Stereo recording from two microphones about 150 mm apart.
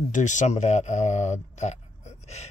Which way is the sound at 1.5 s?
50° left (ahead or behind).